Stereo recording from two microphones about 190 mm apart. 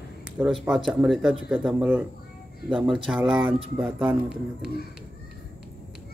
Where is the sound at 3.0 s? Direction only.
Centre (ahead or behind).